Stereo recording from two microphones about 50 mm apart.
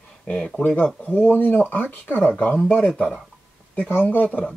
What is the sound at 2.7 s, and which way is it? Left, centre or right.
Speech, centre.